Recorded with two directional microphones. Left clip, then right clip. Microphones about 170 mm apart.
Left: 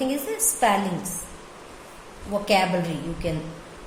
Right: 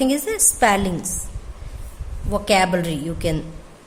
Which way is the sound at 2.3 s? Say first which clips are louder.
Right 4 dB; 45° right (ahead or behind).